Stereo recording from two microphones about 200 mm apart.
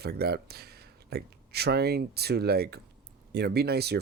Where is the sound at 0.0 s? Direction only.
50° right (ahead or behind).